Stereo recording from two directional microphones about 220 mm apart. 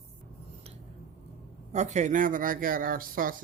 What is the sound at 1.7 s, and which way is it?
Speech, 30° right (ahead or behind).